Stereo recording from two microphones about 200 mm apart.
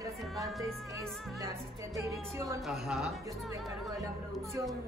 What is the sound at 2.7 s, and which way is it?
Speech, centre (ahead or behind).